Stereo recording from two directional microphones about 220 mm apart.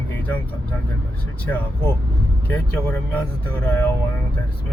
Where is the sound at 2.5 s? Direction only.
10° left (ahead or behind).